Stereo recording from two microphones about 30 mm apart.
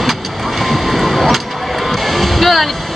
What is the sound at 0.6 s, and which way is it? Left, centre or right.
Vehicle, centre.